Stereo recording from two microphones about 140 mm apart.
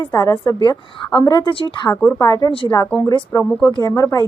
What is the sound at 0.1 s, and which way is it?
A woman's voice, 20° left (ahead or behind).